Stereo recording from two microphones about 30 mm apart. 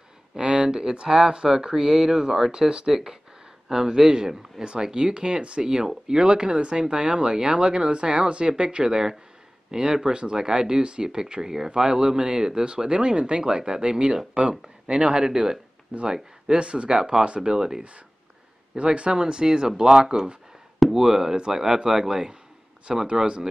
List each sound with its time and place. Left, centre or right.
0.4 s a sound: right
0.7 s speech: right
3.6 s speech: centre; by 8.8 s right
8.8 s speech: centre
14.4 s speech: right
14.9 s speech: right
16.5 s speech: right
16.9 s speech: right
17.4 s speech: centre
18.8 s speech: right
19.1 s speech: right
20.9 s speech: centre